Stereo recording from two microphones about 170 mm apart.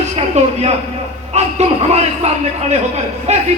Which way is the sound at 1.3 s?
40° right (ahead or behind).